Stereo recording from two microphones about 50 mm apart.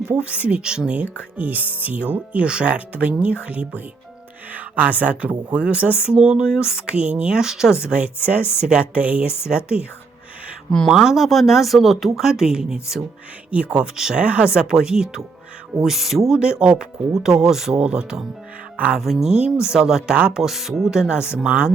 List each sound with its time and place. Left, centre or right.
0.1 s speech: right
1.1 s speech: right
7.4 s speech: centre
7.9 s speech: right
10.8 s speech: centre; by 13.8 s right
13.9 s speech: centre
14.2 s speech: right; by 16.2 s centre
16.3 s speech: centre
17.7 s speech: right
18.9 s speech: centre
19.3 s speech: centre
20.4 s speech: centre